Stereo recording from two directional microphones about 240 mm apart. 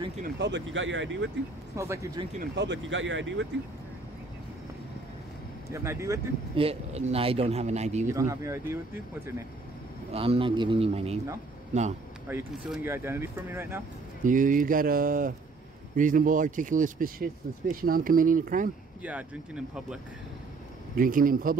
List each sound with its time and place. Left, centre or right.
0.2 s speech: right
1.8 s speech: centre
2.5 s speech: right
5.7 s speech: centre
6.6 s speech: right
8.1 s speech: centre
10.1 s speech: right
12.3 s speech: centre
14.2 s speech: right
19.0 s speech: centre
20.9 s speech: right